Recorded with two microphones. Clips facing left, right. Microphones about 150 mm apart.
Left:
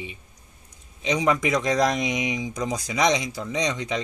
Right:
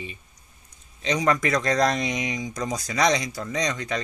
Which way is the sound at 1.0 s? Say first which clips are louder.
Even; 10° left (ahead or behind).